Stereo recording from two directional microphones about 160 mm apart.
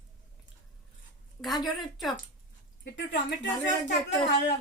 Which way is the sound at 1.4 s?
Centre (ahead or behind).